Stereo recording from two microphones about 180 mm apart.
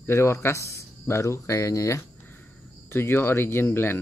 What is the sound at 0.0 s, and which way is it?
Speech, 15° left (ahead or behind).